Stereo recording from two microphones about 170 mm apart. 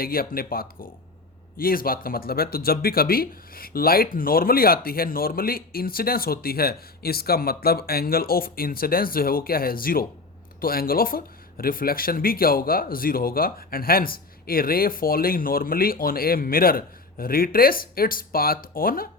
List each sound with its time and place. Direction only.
0.0 s speech: 60° left (ahead or behind)